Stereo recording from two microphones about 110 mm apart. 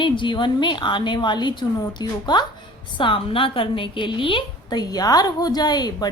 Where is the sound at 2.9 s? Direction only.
50° left (ahead or behind).